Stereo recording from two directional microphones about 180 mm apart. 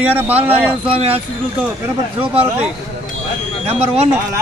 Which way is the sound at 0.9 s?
35° right (ahead or behind).